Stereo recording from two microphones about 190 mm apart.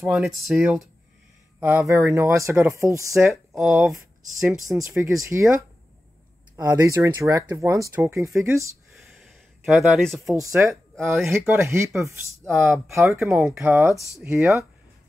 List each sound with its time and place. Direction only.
0.1 s speech: centre (ahead or behind)
3.6 s speech: centre (ahead or behind)
4.6 s speech: 15° right (ahead or behind)
8.9 s a sound: centre (ahead or behind)
10.5 s speech: 10° right (ahead or behind)